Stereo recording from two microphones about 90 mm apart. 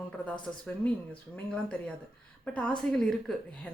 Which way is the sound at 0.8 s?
15° left (ahead or behind).